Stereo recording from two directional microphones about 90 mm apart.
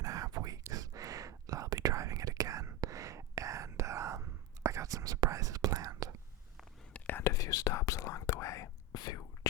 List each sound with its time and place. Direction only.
0.0 s a sound: 40° right (ahead or behind)
0.7 s whispering: 40° right (ahead or behind)
6.9 s whispering: 20° left (ahead or behind)
7.3 s whispering: 40° left (ahead or behind)
9.0 s whispering: 50° left (ahead or behind)